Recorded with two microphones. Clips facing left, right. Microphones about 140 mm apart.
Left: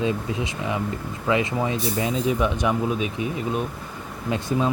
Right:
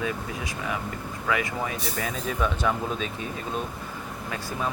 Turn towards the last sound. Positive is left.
turn(degrees=20)  # may be behind; listen again after turning